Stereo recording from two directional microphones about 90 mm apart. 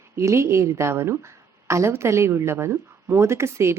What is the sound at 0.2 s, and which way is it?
A woman's voice, 30° right (ahead or behind).